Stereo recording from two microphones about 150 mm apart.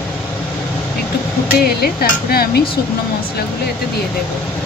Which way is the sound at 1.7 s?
90° left.